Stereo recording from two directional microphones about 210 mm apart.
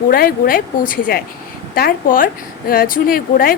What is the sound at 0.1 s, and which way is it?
Speech, 45° left (ahead or behind).